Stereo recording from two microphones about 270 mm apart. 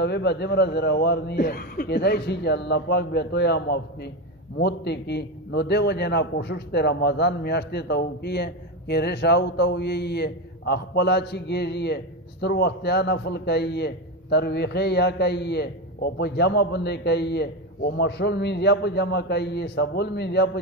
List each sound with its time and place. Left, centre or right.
0.0 s a man's voice: left